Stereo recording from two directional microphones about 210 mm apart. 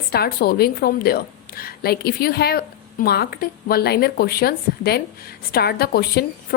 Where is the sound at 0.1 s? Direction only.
45° left (ahead or behind).